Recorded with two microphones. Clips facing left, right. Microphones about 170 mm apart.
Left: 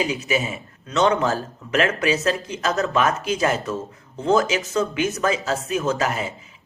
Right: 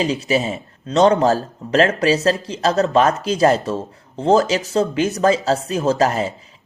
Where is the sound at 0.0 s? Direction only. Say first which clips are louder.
Right 4 dB; 35° right (ahead or behind).